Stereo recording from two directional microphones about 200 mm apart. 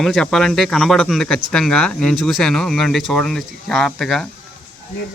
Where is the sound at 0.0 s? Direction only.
Centre (ahead or behind).